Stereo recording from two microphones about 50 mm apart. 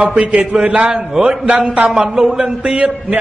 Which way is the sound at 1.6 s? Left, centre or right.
Centre.